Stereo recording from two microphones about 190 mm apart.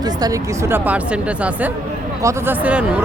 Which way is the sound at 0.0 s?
20° right (ahead or behind).